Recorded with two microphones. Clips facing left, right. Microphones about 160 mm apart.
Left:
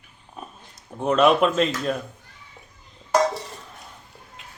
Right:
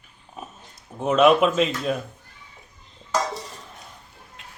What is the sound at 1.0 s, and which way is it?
Speech, centre (ahead or behind).